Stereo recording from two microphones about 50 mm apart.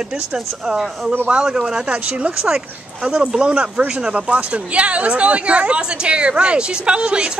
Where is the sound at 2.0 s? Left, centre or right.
Right.